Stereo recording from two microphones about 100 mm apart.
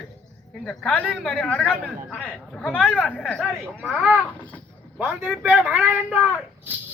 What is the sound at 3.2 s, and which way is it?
Speech, 5° left (ahead or behind).